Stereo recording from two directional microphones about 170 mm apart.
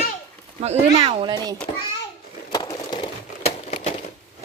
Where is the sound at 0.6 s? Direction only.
35° right (ahead or behind).